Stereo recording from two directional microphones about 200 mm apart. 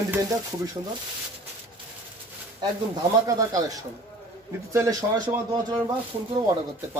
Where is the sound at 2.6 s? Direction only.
20° right (ahead or behind).